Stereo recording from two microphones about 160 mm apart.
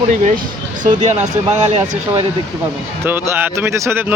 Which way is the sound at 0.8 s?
45° right (ahead or behind).